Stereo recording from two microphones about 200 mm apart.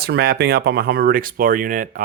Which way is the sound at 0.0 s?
50° right (ahead or behind).